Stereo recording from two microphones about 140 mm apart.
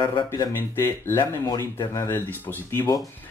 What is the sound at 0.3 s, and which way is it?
Speech, 20° left (ahead or behind).